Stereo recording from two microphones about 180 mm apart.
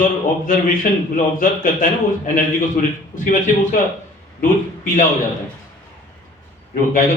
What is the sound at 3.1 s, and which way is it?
Speech, 45° left (ahead or behind).